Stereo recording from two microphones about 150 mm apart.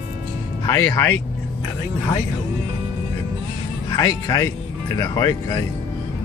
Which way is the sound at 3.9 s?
25° left (ahead or behind).